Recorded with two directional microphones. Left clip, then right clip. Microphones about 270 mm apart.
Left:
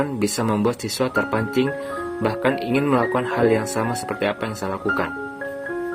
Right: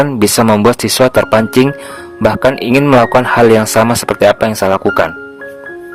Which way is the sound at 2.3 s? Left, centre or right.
Right.